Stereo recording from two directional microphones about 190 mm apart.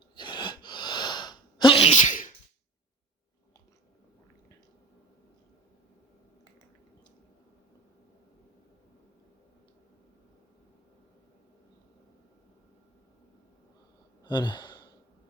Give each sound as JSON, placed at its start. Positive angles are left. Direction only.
{"t": 0.2, "sound": "sneeze", "side_deg": 25}
{"t": 14.3, "sound": "sigh", "side_deg": 25}